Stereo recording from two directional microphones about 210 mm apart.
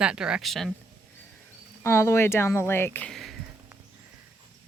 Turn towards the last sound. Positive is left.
turn(degrees=0)  # may be behind; listen again after turning